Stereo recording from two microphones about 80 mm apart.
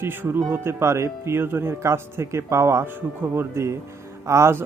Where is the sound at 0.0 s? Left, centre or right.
Right.